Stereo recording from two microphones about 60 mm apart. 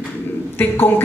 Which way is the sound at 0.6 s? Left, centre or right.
Left.